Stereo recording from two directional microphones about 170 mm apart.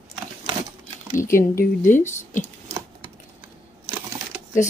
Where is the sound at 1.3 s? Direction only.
55° left (ahead or behind).